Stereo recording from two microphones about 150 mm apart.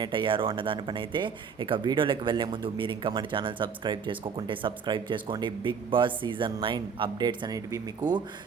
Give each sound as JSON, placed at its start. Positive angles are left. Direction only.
{"t": 0.0, "sound": "speech", "side_deg": -35}